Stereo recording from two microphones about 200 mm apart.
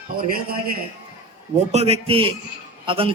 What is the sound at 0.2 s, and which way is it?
Speech, 45° right (ahead or behind).